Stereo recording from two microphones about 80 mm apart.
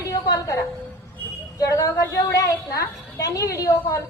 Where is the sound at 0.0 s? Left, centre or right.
Left.